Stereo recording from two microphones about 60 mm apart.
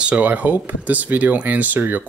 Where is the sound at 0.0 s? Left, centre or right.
Right.